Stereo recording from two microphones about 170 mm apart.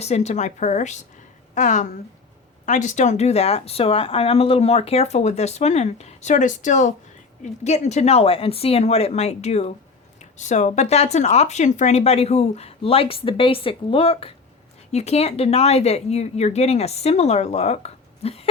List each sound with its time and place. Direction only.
0.0 s speech: 40° left (ahead or behind)